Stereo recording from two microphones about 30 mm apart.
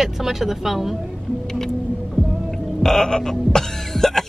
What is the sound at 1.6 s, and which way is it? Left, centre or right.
Music, centre.